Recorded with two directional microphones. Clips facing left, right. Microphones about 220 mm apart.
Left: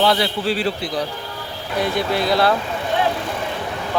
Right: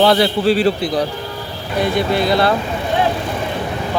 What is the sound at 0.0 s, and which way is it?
A man's voice, 40° right (ahead or behind).